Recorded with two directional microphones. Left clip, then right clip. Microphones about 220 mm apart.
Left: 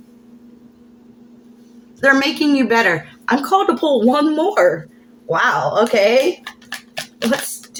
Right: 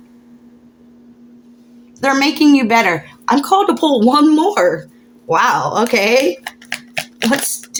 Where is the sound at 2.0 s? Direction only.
35° right (ahead or behind).